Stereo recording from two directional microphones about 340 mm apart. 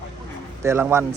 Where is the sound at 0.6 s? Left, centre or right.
Centre.